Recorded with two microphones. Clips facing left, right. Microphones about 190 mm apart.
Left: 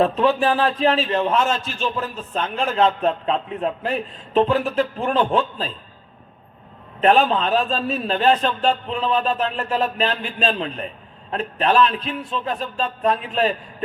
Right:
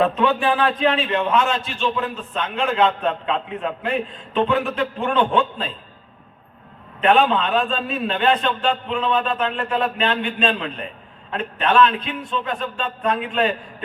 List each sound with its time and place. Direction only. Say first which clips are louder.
0.2 s a man's voice: left 1 dB; 35° left (ahead or behind)
7.0 s a man's voice: even; 35° left (ahead or behind)